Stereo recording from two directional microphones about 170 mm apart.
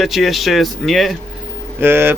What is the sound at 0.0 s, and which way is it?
Speech, centre (ahead or behind).